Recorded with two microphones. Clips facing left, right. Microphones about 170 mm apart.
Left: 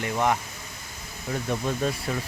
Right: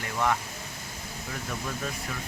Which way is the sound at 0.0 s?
20° left (ahead or behind).